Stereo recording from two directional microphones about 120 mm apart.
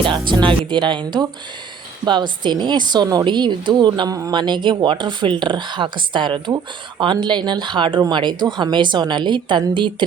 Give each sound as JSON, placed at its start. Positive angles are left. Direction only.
{"t": 0.0, "sound": "a woman's voice", "side_deg": -45}